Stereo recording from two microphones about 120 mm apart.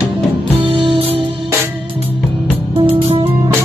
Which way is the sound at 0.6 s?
45° right (ahead or behind).